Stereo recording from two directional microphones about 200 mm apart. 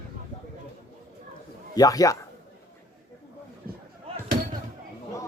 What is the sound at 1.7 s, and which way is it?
Speech, 15° left (ahead or behind).